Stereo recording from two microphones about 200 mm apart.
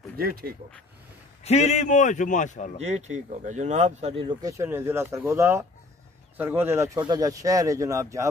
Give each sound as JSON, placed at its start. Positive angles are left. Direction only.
{"t": 0.2, "sound": "speech", "side_deg": -50}
{"t": 1.4, "sound": "a man's voice", "side_deg": 35}
{"t": 2.8, "sound": "speech", "side_deg": -35}
{"t": 4.2, "sound": "speech", "side_deg": -20}